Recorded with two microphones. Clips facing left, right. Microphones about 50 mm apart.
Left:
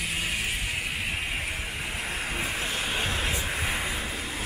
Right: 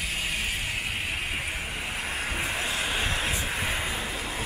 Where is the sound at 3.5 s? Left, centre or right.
Centre.